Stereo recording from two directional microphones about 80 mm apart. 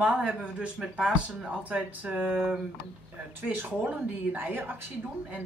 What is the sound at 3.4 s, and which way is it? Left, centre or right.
Speech, right.